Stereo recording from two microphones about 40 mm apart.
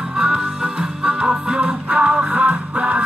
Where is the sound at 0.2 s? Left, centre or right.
Right.